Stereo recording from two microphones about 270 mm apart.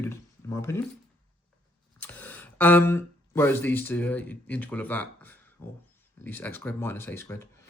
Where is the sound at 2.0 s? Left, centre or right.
Centre.